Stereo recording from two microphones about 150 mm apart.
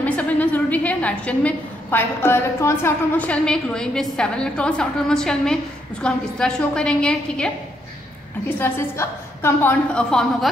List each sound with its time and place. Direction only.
0.0 s a woman's voice: 10° left (ahead or behind)